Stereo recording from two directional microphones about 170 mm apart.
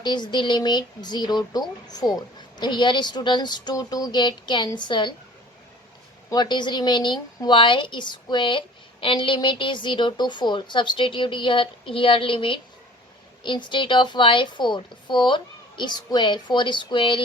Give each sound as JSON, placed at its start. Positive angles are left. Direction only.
{"t": 0.0, "sound": "a woman's voice", "side_deg": 25}
{"t": 6.3, "sound": "a woman's voice", "side_deg": 25}